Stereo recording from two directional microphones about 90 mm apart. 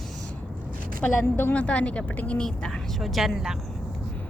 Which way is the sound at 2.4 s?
5° left (ahead or behind).